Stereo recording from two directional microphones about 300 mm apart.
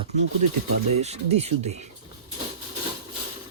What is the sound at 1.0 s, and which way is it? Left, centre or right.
Speech, right.